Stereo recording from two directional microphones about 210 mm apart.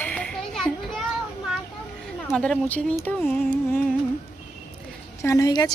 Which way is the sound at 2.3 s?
5° left (ahead or behind).